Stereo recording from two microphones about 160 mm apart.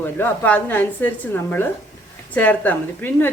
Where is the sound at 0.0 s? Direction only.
15° left (ahead or behind).